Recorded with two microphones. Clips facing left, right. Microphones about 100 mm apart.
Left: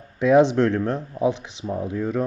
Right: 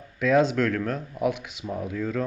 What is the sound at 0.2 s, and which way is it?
Speech, 25° left (ahead or behind).